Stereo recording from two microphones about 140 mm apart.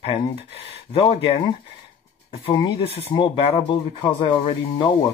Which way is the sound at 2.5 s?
30° left (ahead or behind).